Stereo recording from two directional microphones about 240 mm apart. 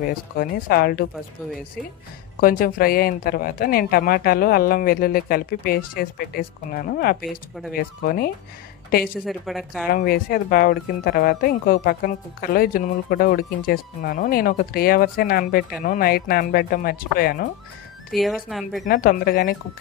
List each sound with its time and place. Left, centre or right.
0.0 s speech: left
2.4 s speech: left
9.2 s speech: centre
9.8 s speech: left
18.1 s speech: centre
18.9 s speech: left